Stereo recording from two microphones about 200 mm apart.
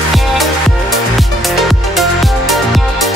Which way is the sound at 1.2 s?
Centre (ahead or behind).